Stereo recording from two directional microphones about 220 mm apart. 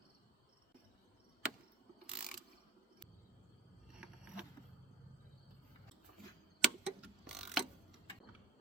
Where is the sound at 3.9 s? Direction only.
5° right (ahead or behind).